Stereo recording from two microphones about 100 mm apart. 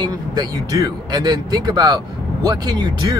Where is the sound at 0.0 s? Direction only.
45° right (ahead or behind).